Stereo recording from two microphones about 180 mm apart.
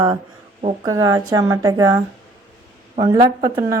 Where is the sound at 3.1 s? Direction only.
30° right (ahead or behind).